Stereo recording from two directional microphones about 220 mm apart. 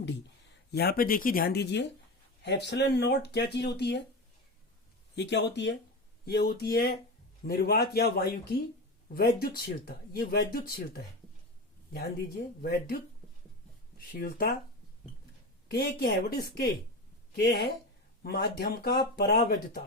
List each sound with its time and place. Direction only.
0.7 s speech: 45° left (ahead or behind)
5.1 s speech: 50° left (ahead or behind)
14.1 s speech: 40° left (ahead or behind)
15.7 s speech: 45° left (ahead or behind)